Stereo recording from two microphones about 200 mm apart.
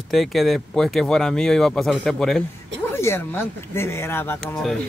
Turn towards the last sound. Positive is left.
turn(degrees=10)  # may be behind; listen again after turning